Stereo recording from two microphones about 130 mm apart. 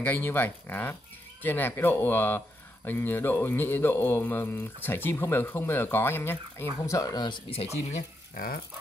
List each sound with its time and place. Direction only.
0.0 s speech: 15° left (ahead or behind); by 7.7 s 45° left (ahead or behind)